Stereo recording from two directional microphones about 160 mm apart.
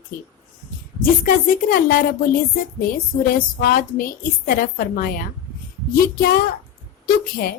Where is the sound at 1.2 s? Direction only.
65° left (ahead or behind).